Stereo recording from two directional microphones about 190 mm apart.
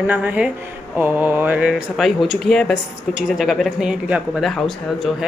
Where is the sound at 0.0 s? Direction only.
10° right (ahead or behind).